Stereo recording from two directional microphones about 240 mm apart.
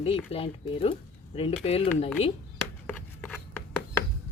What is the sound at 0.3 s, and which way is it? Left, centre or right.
Speech, left.